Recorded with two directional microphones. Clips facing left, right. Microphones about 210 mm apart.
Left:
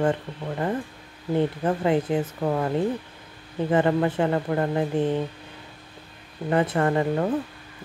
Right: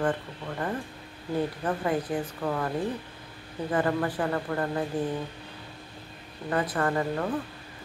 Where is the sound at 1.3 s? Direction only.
25° left (ahead or behind).